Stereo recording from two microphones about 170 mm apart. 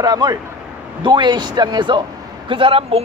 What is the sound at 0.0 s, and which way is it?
A man's voice, 20° right (ahead or behind).